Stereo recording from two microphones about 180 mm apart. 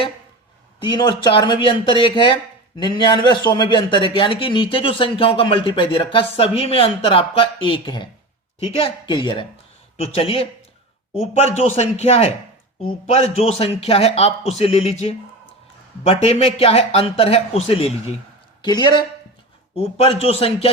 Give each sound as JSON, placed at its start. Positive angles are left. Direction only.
{"t": 0.8, "sound": "a man's voice", "side_deg": 25}
{"t": 18.6, "sound": "a man's voice", "side_deg": 25}